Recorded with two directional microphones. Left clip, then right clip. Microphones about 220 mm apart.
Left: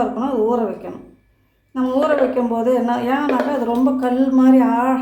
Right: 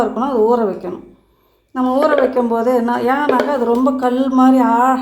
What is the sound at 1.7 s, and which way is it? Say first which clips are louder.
A woman's voice: right 3 dB; 30° right (ahead or behind).